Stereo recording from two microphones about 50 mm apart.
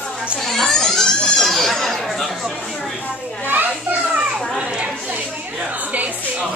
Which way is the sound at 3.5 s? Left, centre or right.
Right.